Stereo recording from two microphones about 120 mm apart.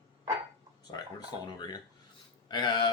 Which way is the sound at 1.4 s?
35° left (ahead or behind).